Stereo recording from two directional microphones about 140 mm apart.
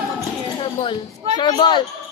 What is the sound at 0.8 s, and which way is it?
A child's voice, 35° left (ahead or behind).